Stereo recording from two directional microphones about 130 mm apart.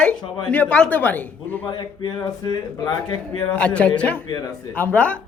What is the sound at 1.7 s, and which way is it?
Speech, 35° left (ahead or behind).